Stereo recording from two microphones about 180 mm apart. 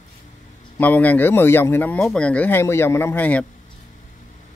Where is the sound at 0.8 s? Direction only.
10° left (ahead or behind).